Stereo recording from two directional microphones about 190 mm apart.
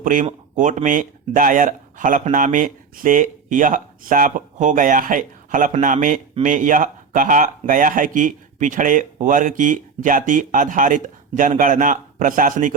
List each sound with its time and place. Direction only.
0.0 s speech: 45° right (ahead or behind)